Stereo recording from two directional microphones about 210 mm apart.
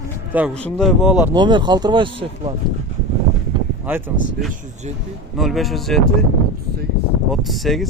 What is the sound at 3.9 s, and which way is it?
Speech, 10° right (ahead or behind).